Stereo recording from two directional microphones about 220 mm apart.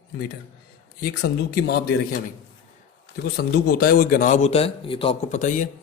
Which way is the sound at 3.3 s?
45° left (ahead or behind).